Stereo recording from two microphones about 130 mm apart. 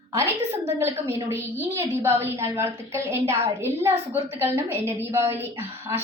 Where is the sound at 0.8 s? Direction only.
20° right (ahead or behind).